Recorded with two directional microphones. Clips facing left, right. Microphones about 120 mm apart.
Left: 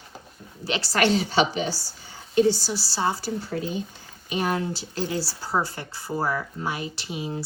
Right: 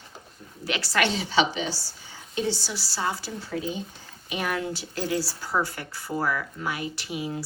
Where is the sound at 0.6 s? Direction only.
30° left (ahead or behind).